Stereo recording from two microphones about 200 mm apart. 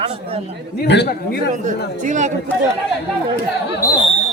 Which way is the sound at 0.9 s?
55° left (ahead or behind).